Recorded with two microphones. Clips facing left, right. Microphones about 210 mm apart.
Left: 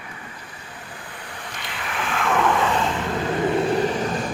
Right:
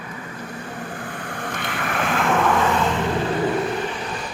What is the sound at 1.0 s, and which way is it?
Vehicle, 50° right (ahead or behind).